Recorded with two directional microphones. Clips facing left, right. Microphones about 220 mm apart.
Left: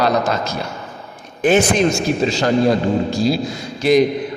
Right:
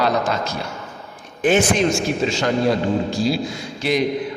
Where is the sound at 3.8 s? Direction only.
45° left (ahead or behind).